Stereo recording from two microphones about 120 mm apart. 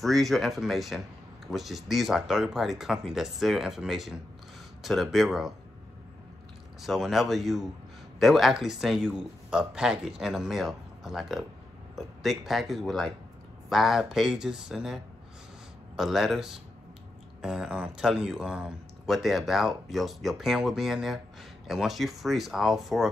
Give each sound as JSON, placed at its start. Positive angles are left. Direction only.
{"t": 0.0, "sound": "speech", "side_deg": 0}
{"t": 6.8, "sound": "speech", "side_deg": 0}
{"t": 16.0, "sound": "speech", "side_deg": 0}